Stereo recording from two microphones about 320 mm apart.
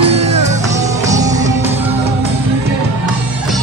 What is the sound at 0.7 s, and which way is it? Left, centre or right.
Music, centre.